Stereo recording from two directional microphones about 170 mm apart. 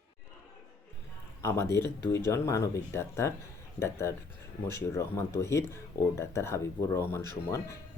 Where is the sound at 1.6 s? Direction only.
85° left.